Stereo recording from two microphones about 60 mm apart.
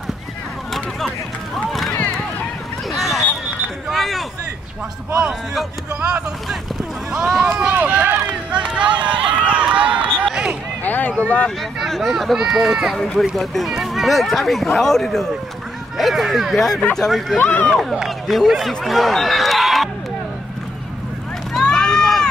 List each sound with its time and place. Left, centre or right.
1.5 s run: centre
2.9 s a sound: centre
7.1 s speech: centre
7.4 s run: centre
7.7 s run: right
8.5 s run: centre
10.8 s a sound: left
11.2 s speech: left
11.8 s speech: centre
12.9 s speech: centre
17.4 s speech: left
17.7 s speech: centre
21.6 s run: centre